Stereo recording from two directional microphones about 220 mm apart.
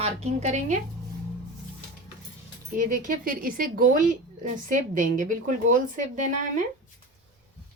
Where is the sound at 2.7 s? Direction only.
40° right (ahead or behind).